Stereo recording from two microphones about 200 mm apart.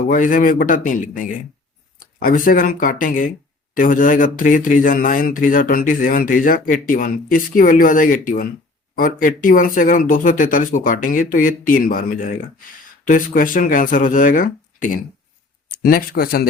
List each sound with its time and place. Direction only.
0.1 s speech: 40° left (ahead or behind)